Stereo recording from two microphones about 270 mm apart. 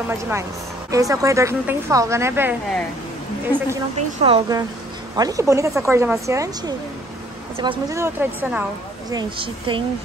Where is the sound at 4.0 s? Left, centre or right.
Right.